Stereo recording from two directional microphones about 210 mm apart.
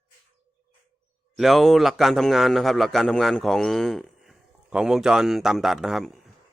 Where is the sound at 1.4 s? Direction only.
Centre (ahead or behind).